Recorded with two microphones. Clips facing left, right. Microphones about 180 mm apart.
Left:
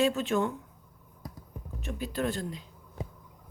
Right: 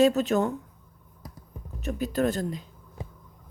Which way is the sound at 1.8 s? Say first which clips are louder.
Right 6 dB; 45° right (ahead or behind).